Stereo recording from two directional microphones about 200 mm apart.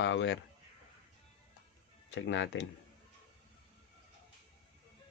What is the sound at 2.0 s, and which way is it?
Speech, 65° left (ahead or behind).